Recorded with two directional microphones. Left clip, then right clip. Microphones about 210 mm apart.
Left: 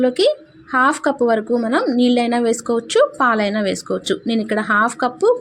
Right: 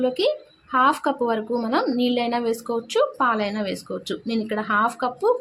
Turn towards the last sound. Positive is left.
turn(degrees=20)  # may be behind; listen again after turning